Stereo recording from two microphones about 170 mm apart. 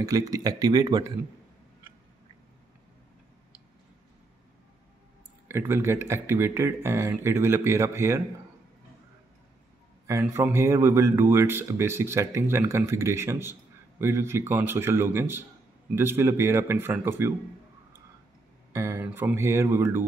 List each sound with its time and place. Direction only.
0.0 s speech: 20° right (ahead or behind)
5.5 s speech: 15° right (ahead or behind)
10.3 s speech: 15° right (ahead or behind)
18.7 s speech: 15° right (ahead or behind)